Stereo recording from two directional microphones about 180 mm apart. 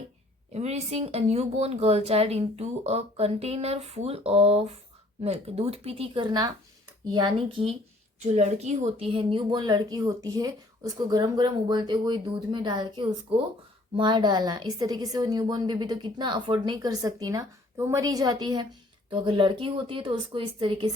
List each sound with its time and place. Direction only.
0.5 s a woman's voice: 35° right (ahead or behind)